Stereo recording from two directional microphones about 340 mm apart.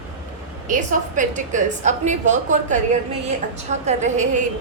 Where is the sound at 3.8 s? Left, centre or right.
Right.